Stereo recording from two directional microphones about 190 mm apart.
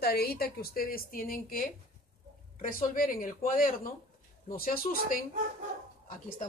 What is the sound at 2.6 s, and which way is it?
A woman's voice, 45° left (ahead or behind).